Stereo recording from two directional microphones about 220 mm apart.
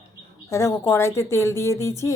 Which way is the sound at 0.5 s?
10° left (ahead or behind).